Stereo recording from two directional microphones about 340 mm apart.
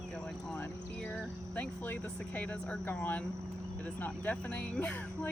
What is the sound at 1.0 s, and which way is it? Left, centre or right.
Speech, centre.